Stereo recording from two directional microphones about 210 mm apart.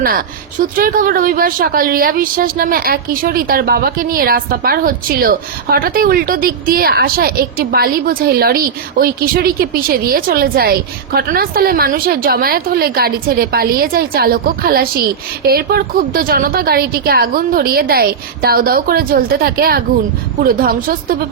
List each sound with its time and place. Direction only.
0.6 s a woman's voice: 45° right (ahead or behind)